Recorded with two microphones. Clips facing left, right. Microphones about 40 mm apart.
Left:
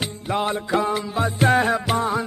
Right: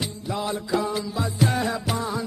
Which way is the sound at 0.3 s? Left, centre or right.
Left.